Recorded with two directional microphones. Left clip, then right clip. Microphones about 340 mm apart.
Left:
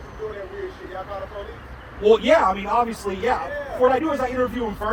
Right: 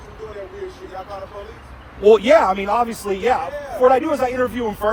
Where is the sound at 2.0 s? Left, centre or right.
Centre.